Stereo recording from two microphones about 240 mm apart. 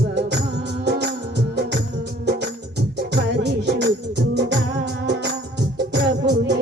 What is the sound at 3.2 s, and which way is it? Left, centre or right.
Music, right.